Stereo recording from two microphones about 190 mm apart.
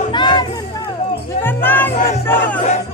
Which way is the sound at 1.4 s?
10° left (ahead or behind).